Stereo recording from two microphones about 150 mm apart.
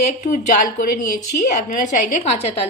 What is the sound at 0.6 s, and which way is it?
Speech, 65° left (ahead or behind).